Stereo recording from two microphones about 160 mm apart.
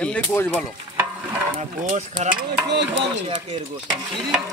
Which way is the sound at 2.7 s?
90° right.